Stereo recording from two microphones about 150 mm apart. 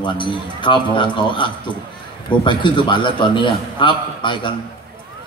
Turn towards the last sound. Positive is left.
turn(degrees=30)  # may be behind; listen again after turning